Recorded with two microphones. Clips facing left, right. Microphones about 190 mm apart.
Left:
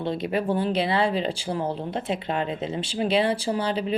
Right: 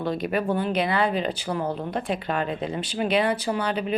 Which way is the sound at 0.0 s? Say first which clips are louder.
Even; 25° left (ahead or behind).